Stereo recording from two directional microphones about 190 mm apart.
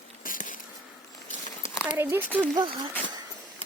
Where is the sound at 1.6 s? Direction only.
40° left (ahead or behind).